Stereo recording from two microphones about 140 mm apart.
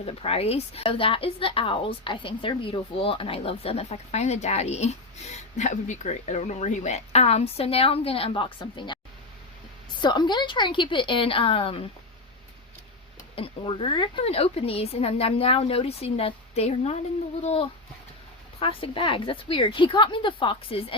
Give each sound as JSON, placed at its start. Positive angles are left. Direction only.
{"t": 0.0, "sound": "a woman's voice", "side_deg": 45}
{"t": 10.0, "sound": "a woman's voice", "side_deg": 30}
{"t": 13.3, "sound": "a woman's voice", "side_deg": 40}